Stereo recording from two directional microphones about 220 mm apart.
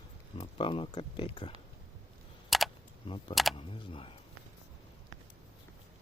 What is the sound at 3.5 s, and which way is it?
Speech, 25° left (ahead or behind).